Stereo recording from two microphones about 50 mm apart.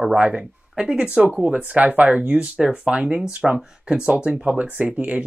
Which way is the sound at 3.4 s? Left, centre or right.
Centre.